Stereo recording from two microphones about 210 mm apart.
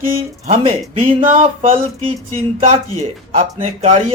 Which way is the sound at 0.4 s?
30° right (ahead or behind).